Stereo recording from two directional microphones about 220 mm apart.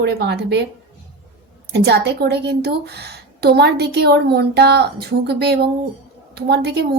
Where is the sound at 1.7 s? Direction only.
50° right (ahead or behind).